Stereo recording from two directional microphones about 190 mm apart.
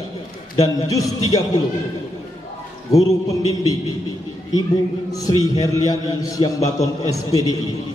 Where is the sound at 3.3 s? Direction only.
20° left (ahead or behind).